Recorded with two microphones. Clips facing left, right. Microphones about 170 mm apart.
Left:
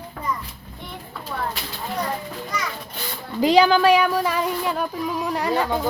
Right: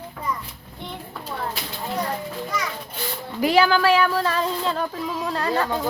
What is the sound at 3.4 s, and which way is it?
Speech, 20° left (ahead or behind).